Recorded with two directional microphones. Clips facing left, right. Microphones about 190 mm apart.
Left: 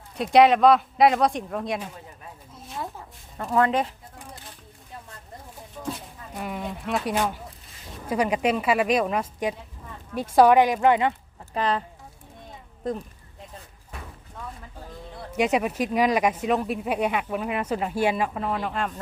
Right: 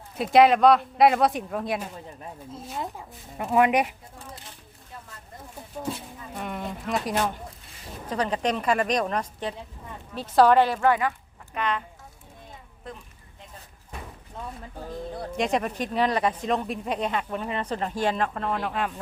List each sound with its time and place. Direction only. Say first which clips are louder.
0.2 s speech: left 1 dB; centre (ahead or behind)
3.3 s speech: right 1 dB; 15° right (ahead or behind)
6.3 s speech: left 1 dB; 5° left (ahead or behind); by 11.1 s 20° left (ahead or behind)
11.5 s speech: left 3 dB; 35° left (ahead or behind)
12.8 s speech: left 12 dB; 40° left (ahead or behind)
15.4 s speech: left 3 dB; 10° left (ahead or behind)